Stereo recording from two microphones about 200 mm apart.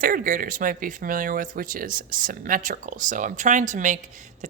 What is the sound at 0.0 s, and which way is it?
Speech, 45° right (ahead or behind).